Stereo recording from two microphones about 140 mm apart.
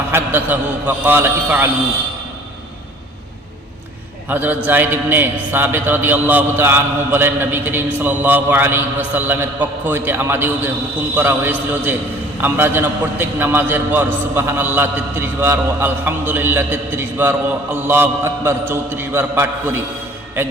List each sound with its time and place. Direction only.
0.1 s a man's voice: 15° right (ahead or behind)
4.3 s a man's voice: 10° right (ahead or behind)